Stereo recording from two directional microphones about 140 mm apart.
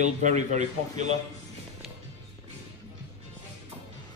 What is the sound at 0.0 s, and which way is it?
Speech, 55° right (ahead or behind).